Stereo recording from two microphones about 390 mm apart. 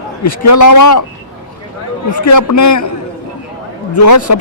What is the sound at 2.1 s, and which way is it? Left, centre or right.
Speech, left.